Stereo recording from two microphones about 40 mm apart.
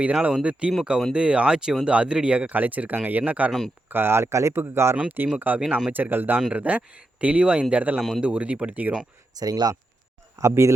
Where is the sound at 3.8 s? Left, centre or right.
Right.